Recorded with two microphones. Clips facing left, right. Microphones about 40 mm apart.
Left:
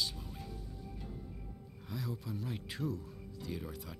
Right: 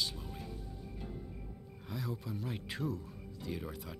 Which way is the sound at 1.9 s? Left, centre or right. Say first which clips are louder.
Right 1 dB; centre.